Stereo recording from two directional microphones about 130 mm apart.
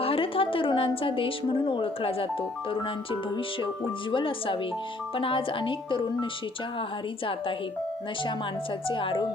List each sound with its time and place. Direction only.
0.0 s a woman's voice: 45° left (ahead or behind)
8.9 s speech: 40° left (ahead or behind)